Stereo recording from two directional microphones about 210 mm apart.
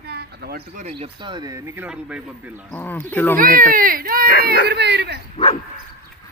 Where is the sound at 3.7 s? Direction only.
40° right (ahead or behind).